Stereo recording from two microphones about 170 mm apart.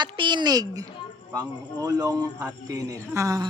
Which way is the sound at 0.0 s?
25° right (ahead or behind).